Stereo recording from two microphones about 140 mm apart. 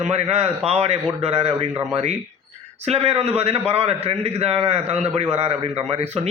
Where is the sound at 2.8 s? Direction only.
45° right (ahead or behind).